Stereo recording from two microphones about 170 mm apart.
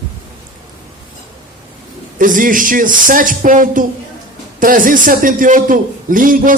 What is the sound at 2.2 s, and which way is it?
A man's voice, 55° right (ahead or behind).